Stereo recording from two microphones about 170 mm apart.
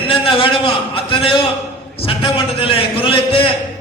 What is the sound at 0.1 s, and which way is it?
A man's voice, 30° left (ahead or behind).